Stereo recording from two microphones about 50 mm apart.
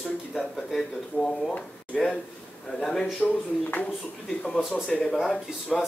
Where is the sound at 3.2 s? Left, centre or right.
Left.